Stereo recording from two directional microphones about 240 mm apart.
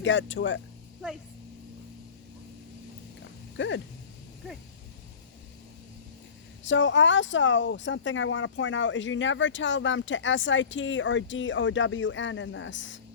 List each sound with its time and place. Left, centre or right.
0.0 s speech: left
1.0 s speech: centre
3.6 s speech: left
6.7 s speech: left